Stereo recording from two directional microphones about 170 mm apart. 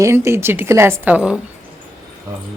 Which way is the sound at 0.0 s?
15° right (ahead or behind).